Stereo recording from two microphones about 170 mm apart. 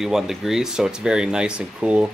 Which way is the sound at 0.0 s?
Centre (ahead or behind).